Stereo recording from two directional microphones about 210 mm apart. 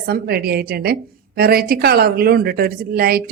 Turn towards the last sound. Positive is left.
turn(degrees=-45)  # may be behind; listen again after turning